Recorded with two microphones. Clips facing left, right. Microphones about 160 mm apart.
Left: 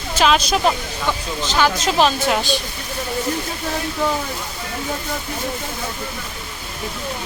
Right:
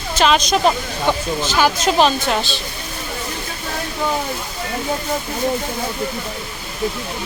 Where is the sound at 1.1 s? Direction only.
20° right (ahead or behind).